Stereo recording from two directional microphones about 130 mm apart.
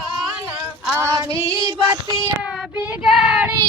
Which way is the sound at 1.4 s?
25° right (ahead or behind).